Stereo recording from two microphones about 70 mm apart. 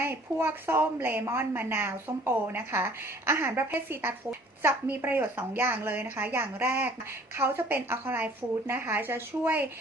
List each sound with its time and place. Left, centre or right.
0.0 s a woman's voice: right